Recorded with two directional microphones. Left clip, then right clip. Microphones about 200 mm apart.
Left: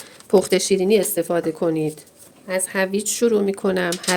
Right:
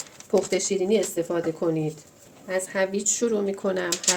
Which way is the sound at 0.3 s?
45° left (ahead or behind).